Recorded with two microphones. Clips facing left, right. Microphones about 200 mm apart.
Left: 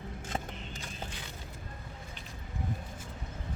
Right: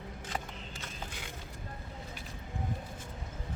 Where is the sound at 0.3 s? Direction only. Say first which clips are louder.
Left 2 dB; 15° left (ahead or behind).